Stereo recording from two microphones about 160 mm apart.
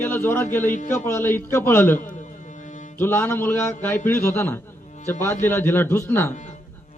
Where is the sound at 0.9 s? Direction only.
15° left (ahead or behind).